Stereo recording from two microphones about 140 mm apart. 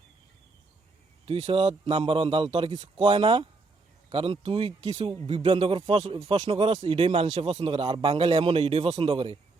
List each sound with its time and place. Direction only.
1.2 s a man's voice: 40° right (ahead or behind)